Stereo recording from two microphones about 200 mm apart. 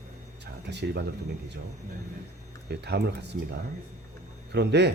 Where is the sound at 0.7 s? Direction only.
60° right (ahead or behind).